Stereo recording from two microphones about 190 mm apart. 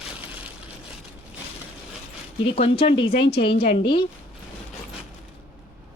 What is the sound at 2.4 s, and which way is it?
Speech, 30° left (ahead or behind).